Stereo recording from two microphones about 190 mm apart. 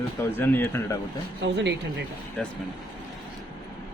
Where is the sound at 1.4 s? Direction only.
65° right (ahead or behind).